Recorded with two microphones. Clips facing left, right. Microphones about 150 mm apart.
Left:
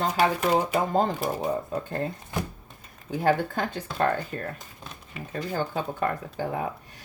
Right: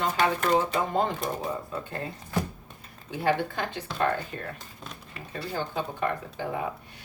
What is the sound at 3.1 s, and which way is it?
Speech, 45° left (ahead or behind).